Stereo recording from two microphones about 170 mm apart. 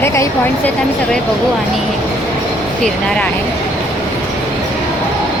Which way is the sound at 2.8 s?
5° left (ahead or behind).